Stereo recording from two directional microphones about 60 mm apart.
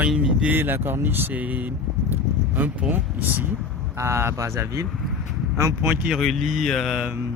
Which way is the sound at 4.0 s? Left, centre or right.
Right.